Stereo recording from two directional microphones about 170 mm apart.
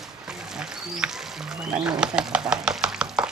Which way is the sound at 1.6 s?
5° right (ahead or behind).